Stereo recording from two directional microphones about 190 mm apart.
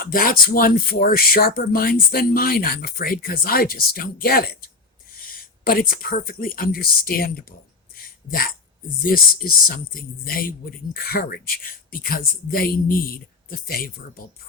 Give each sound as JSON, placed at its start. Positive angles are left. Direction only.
{"t": 0.0, "sound": "speech", "side_deg": 50}
{"t": 7.9, "sound": "a sound", "side_deg": 50}
{"t": 9.0, "sound": "speech", "side_deg": 50}